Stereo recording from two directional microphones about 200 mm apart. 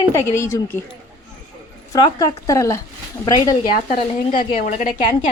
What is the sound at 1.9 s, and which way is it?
Speech, 15° left (ahead or behind).